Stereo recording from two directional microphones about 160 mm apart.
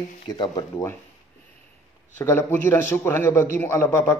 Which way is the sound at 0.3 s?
25° left (ahead or behind).